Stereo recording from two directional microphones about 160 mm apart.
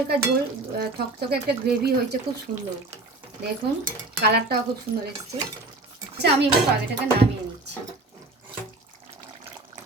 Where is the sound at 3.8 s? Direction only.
80° right.